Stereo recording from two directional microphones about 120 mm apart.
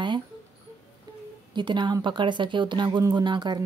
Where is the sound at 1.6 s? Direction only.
40° right (ahead or behind).